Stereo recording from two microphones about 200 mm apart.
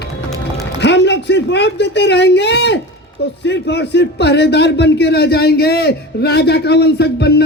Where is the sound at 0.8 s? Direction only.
60° left (ahead or behind).